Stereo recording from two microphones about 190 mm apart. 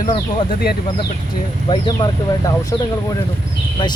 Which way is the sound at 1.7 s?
25° left (ahead or behind).